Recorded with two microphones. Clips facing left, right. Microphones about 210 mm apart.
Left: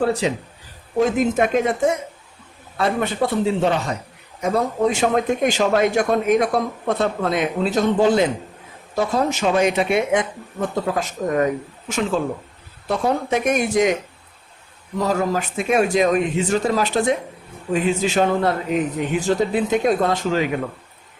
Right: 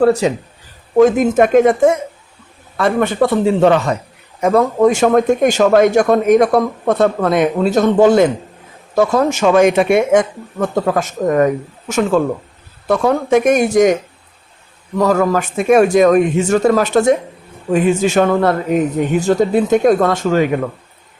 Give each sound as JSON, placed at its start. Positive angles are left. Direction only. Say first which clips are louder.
{"t": 0.0, "sound": "a man's voice", "louder": "right 7 dB", "side_deg": -45}
{"t": 2.7, "sound": "speech", "louder": "right 6 dB", "side_deg": -70}
{"t": 4.4, "sound": "a man's voice", "louder": "right 7 dB", "side_deg": -55}
{"t": 10.6, "sound": "a man's voice", "louder": "right 6 dB", "side_deg": -60}
{"t": 12.9, "sound": "speech", "louder": "right 6 dB", "side_deg": -80}
{"t": 13.3, "sound": "a man's voice", "louder": "right 9 dB", "side_deg": -45}
{"t": 14.9, "sound": "a man's voice", "louder": "right 7 dB", "side_deg": -60}
{"t": 20.0, "sound": "a man's voice", "louder": "right 6 dB", "side_deg": -55}